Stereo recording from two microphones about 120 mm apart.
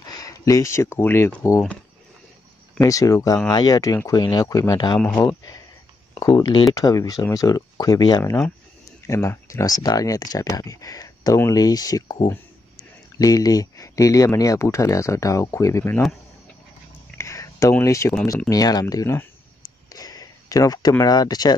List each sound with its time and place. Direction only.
0.0 s speech: 30° left (ahead or behind)
2.8 s speech: 30° left (ahead or behind)
17.2 s a sound: 25° left (ahead or behind)
17.7 s speech: 25° left (ahead or behind)
19.9 s a sound: 30° left (ahead or behind)
21.0 s speech: 35° left (ahead or behind)